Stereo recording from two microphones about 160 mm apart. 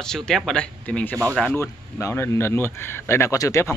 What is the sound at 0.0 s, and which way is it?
Speech, 5° left (ahead or behind).